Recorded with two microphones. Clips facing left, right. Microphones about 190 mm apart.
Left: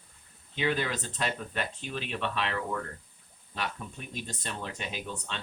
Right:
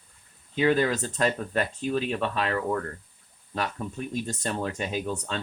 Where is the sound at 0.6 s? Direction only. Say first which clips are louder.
Right 7 dB; 45° right (ahead or behind).